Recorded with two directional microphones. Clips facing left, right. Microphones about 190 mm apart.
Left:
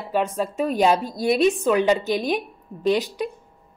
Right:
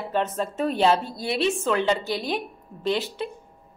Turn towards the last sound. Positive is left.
turn(degrees=15)  # may be behind; listen again after turning